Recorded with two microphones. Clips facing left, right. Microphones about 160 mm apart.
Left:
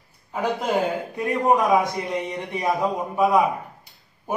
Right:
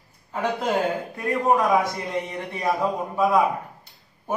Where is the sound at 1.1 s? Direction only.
15° left (ahead or behind).